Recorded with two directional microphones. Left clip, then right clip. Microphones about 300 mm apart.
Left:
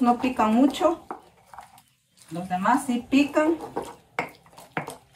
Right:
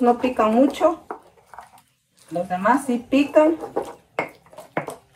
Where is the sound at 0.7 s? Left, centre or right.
Centre.